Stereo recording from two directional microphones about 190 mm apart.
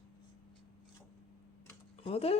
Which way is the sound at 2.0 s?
30° left (ahead or behind).